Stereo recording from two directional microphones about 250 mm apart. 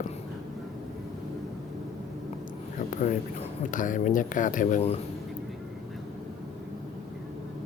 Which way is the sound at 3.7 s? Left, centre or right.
Left.